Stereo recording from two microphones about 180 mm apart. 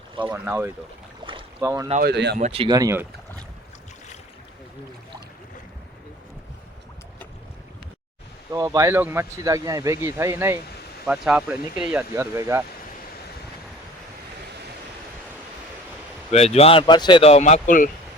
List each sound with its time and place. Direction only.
0.3 s speech: 10° right (ahead or behind)
1.2 s boat: 30° right (ahead or behind)
1.6 s speech: 15° right (ahead or behind)
2.0 s speech: 65° right (ahead or behind)
2.4 s speech: 30° right (ahead or behind)
2.7 s speech: 15° right (ahead or behind)
8.5 s speech: 15° right (ahead or behind)
16.3 s speech: 35° left (ahead or behind)